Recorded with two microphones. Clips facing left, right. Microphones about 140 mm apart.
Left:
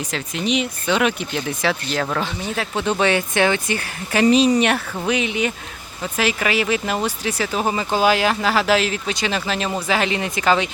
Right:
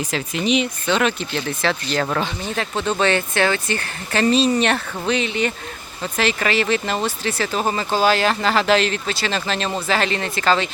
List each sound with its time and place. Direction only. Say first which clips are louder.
0.0 s speech: right 2 dB; centre (ahead or behind)
0.9 s speech: left 2 dB; 10° left (ahead or behind)